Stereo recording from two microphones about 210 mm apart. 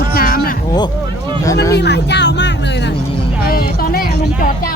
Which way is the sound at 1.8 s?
55° left (ahead or behind).